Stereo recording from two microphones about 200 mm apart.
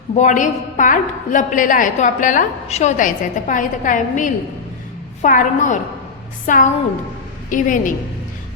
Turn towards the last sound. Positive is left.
turn(degrees=40)  # may be behind; listen again after turning